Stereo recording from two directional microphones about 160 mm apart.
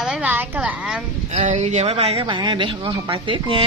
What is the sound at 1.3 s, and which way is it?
Speech, 45° right (ahead or behind).